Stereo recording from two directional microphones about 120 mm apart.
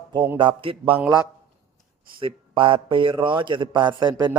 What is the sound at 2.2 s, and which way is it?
A man's voice, 45° right (ahead or behind).